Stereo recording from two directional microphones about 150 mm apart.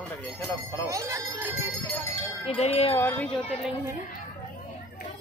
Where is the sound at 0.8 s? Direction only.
20° right (ahead or behind).